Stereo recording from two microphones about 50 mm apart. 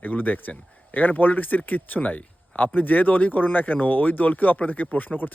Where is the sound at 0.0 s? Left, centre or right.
Left.